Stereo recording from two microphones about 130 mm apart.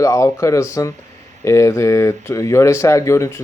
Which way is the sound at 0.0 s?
25° left (ahead or behind).